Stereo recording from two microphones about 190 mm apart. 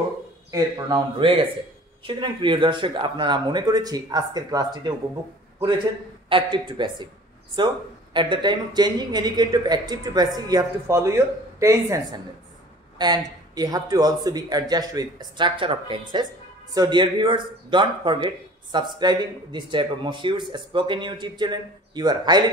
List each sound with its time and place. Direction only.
0.5 s a man's voice: 20° right (ahead or behind)
6.2 s a man's voice: 25° right (ahead or behind)